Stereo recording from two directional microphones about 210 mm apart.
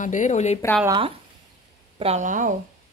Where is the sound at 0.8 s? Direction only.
20° right (ahead or behind).